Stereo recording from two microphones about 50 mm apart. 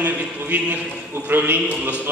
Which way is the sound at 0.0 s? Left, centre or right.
Right.